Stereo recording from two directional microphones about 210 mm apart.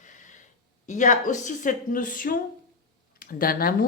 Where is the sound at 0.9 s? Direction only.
35° left (ahead or behind).